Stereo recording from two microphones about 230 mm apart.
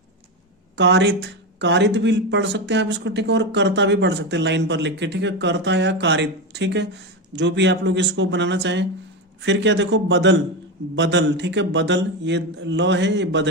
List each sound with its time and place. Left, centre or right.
0.8 s speech: right